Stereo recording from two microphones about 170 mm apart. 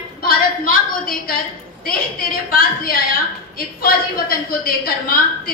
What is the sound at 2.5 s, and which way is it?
A woman's voice, 60° left (ahead or behind).